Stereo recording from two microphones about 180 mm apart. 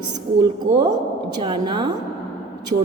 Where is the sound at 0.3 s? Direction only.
25° right (ahead or behind).